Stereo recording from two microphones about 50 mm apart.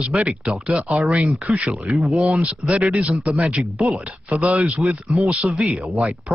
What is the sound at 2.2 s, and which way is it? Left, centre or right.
Speech, right.